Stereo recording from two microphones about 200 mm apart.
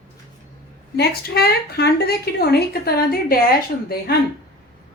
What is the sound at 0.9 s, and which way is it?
A woman's voice, 50° left (ahead or behind).